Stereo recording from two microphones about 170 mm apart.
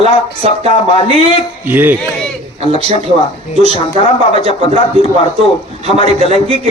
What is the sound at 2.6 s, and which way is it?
Speech, 40° right (ahead or behind).